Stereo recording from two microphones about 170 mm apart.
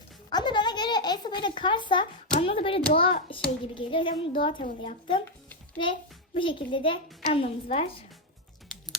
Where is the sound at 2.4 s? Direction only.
35° left (ahead or behind).